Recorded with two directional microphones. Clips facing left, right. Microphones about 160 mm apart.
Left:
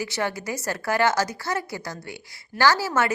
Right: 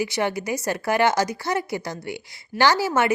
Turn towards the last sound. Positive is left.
turn(degrees=-15)  # may be behind; listen again after turning